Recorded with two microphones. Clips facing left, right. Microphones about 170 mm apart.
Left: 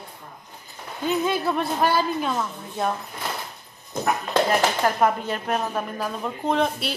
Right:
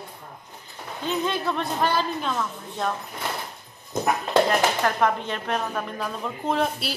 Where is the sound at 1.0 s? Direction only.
10° left (ahead or behind).